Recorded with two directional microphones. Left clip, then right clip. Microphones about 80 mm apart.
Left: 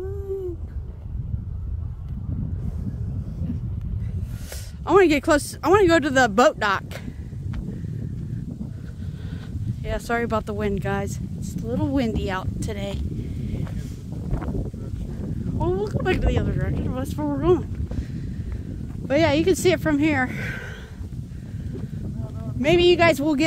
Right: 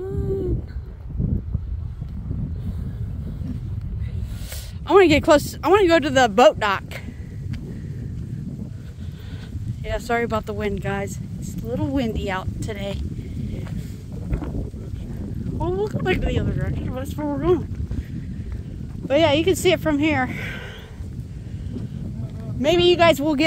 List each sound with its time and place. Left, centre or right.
4.8 s speech: centre
5.8 s speech: left
9.8 s speech: left
10.8 s speech: left
15.4 s boat: centre
15.8 s speech: left
16.4 s speech: centre
16.7 s speech: left
17.6 s a sound: centre
19.0 s speech: left
22.6 s speech: left